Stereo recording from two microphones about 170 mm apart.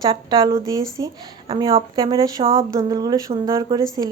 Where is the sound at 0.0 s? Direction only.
25° right (ahead or behind).